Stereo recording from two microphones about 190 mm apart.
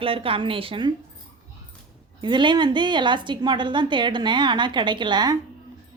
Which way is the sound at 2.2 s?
25° right (ahead or behind).